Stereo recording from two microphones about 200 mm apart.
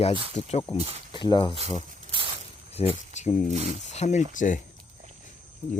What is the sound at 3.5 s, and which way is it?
Speech, 30° right (ahead or behind).